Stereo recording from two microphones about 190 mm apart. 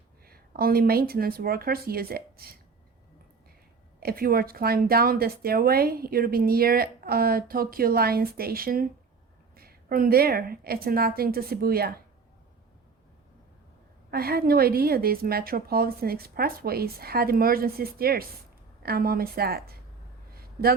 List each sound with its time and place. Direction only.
0.3 s speech: 50° right (ahead or behind)
4.0 s speech: 50° right (ahead or behind)
14.1 s speech: 55° right (ahead or behind)
20.3 s a sound: 55° right (ahead or behind)